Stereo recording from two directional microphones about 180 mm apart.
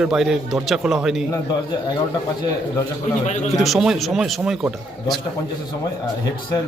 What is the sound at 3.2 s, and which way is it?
Speech, 40° left (ahead or behind).